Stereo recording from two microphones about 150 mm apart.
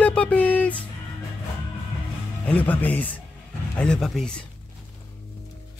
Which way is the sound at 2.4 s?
10° left (ahead or behind).